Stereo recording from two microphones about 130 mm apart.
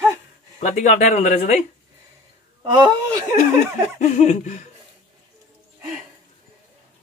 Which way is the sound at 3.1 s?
20° right (ahead or behind).